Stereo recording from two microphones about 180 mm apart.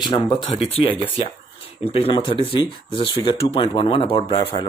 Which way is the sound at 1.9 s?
30° left (ahead or behind).